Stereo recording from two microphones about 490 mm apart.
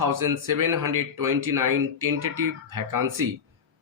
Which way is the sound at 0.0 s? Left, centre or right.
Right.